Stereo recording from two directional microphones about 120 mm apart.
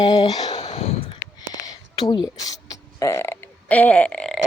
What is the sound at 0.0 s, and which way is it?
Speech, 35° left (ahead or behind).